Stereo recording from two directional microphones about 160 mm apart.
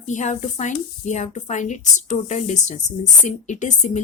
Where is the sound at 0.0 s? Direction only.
50° left (ahead or behind).